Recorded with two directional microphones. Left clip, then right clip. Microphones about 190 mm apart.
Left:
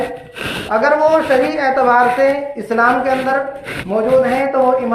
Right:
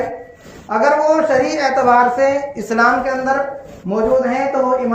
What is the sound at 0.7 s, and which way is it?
Speech, 45° right (ahead or behind).